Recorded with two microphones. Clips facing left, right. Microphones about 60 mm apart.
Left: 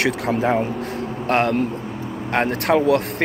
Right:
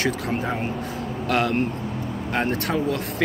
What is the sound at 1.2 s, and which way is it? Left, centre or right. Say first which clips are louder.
Speech: left 3 dB; left.